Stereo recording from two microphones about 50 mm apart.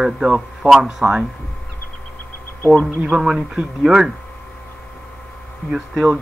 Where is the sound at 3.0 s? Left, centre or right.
Centre.